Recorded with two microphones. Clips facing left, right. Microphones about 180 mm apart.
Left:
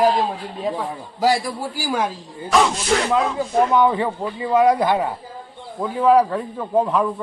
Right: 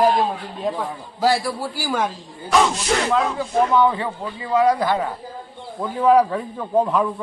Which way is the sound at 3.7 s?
15° left (ahead or behind).